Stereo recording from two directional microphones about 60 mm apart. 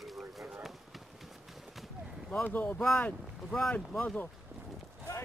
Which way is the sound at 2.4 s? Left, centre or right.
Left.